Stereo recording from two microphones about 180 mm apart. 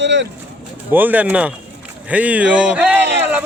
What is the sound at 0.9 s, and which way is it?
Speech, 10° right (ahead or behind).